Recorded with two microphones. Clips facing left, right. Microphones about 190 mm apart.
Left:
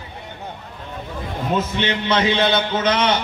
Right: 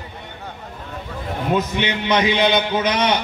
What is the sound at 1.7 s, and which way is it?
Mantra, 15° right (ahead or behind).